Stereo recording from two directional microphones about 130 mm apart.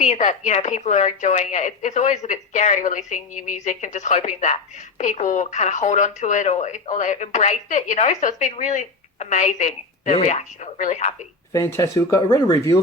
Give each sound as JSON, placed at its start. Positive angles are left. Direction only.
{"t": 0.0, "sound": "speech", "side_deg": 70}
{"t": 11.5, "sound": "speech", "side_deg": 25}